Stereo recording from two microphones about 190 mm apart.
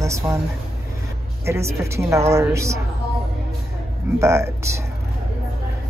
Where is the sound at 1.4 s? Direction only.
15° right (ahead or behind).